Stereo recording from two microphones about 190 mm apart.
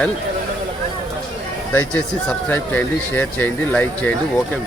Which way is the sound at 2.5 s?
10° left (ahead or behind).